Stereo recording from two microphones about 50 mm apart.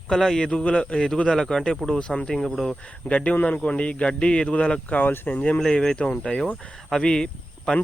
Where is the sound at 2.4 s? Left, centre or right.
Centre.